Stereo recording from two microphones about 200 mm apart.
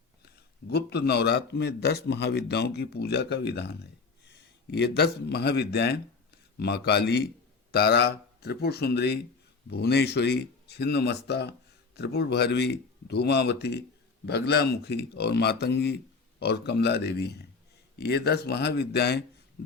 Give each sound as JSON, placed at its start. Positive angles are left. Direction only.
{"t": 0.7, "sound": "a man's voice", "side_deg": 55}